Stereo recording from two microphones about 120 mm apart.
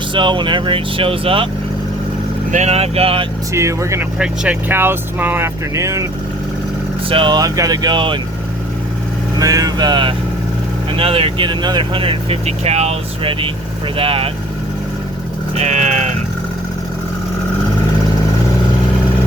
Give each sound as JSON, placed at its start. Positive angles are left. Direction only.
{"t": 0.1, "sound": "speech", "side_deg": -40}
{"t": 2.5, "sound": "speech", "side_deg": -70}
{"t": 3.5, "sound": "speech", "side_deg": -25}
{"t": 4.2, "sound": "speech", "side_deg": -15}
{"t": 7.1, "sound": "speech", "side_deg": -45}
{"t": 7.3, "sound": "speech", "side_deg": -30}
{"t": 9.4, "sound": "speech", "side_deg": -30}
{"t": 13.9, "sound": "speech", "side_deg": -50}
{"t": 15.5, "sound": "speech", "side_deg": -70}